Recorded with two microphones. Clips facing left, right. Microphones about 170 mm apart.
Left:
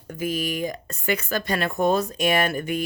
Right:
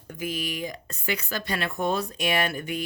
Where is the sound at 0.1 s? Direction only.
45° left (ahead or behind).